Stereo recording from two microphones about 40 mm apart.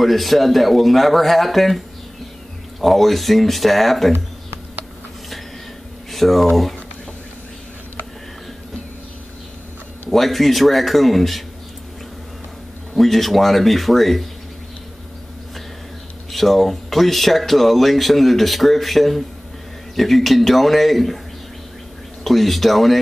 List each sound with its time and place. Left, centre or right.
0.0 s speech: centre
2.8 s speech: centre
4.1 s a sound: right
6.1 s speech: centre
10.1 s speech: centre
12.9 s speech: centre
16.3 s speech: centre
22.2 s speech: centre